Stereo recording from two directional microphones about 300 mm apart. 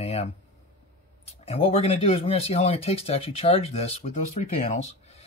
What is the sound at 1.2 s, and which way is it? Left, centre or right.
Speech, centre.